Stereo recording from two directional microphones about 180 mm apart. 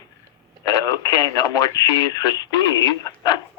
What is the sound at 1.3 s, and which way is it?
Speech, 20° left (ahead or behind).